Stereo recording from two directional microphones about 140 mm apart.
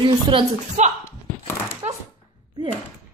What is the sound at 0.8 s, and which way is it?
Speech, 55° right (ahead or behind).